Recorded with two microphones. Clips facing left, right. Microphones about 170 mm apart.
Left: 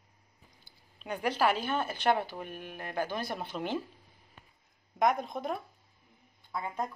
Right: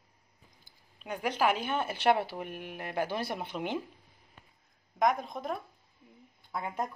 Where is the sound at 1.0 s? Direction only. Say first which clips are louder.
Even; 10° right (ahead or behind).